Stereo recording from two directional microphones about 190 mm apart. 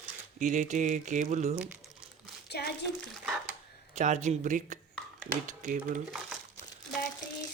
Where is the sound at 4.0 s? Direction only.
40° right (ahead or behind).